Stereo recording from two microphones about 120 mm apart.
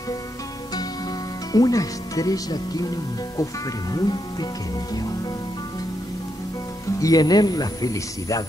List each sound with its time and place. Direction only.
1.5 s speech: 30° left (ahead or behind)
7.0 s speech: 30° left (ahead or behind)